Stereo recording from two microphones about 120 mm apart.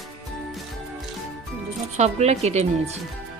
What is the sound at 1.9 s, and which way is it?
Speech, 65° right (ahead or behind).